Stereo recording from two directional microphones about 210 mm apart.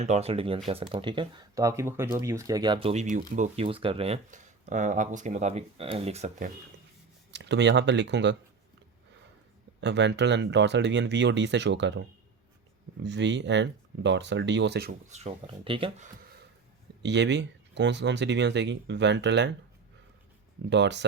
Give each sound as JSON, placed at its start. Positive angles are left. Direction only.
{"t": 0.0, "sound": "speech", "side_deg": -30}
{"t": 7.3, "sound": "speech", "side_deg": -55}
{"t": 9.8, "sound": "speech", "side_deg": -55}
{"t": 15.1, "sound": "speech", "side_deg": -30}
{"t": 17.0, "sound": "speech", "side_deg": -55}
{"t": 20.7, "sound": "speech", "side_deg": -55}